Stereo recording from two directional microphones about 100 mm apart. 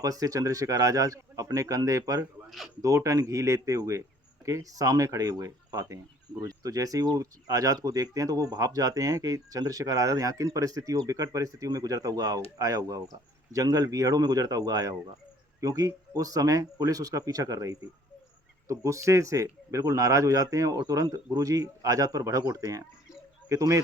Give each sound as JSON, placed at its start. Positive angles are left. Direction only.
{"t": 0.0, "sound": "speech", "side_deg": -35}